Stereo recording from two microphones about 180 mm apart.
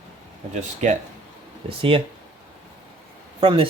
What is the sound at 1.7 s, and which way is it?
Speech, 30° right (ahead or behind).